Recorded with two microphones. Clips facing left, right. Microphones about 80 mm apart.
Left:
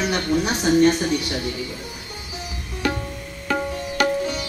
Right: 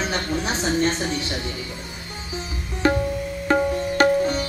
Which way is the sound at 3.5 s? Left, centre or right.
Right.